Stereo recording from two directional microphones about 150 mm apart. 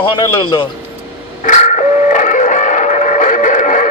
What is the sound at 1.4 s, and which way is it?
Music, 55° left (ahead or behind).